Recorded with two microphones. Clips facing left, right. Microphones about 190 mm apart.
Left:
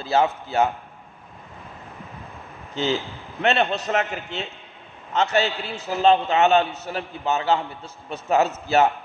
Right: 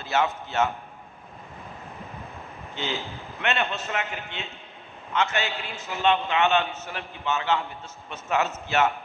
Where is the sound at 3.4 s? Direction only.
35° left (ahead or behind).